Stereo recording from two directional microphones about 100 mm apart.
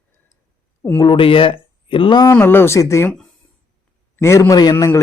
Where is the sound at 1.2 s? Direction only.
65° left (ahead or behind).